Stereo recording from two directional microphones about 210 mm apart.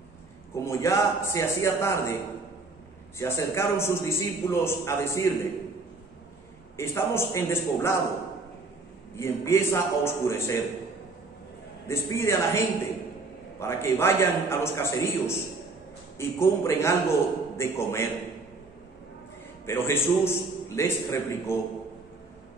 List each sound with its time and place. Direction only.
0.7 s a man's voice: 15° left (ahead or behind)
3.2 s a man's voice: 15° left (ahead or behind)
6.8 s a man's voice: 10° left (ahead or behind)
9.1 s a man's voice: 10° left (ahead or behind)
11.9 s a man's voice: 10° left (ahead or behind)
19.6 s a man's voice: 10° left (ahead or behind)